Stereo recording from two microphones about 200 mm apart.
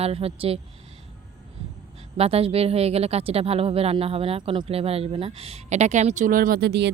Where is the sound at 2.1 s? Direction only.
30° right (ahead or behind).